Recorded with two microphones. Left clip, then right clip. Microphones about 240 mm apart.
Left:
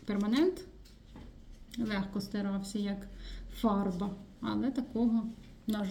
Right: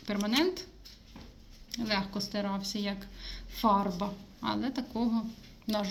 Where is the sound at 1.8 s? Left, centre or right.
Centre.